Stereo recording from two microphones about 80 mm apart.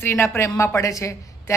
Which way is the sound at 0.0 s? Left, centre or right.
Left.